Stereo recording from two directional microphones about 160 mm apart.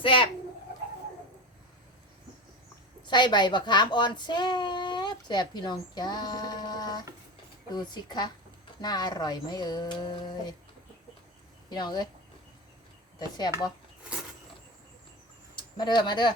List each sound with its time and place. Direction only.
0.0 s a child's voice: 35° left (ahead or behind)
3.1 s speech: 30° left (ahead or behind)
11.7 s speech: 25° left (ahead or behind)
13.1 s speech: 25° left (ahead or behind)
15.5 s speech: 30° left (ahead or behind)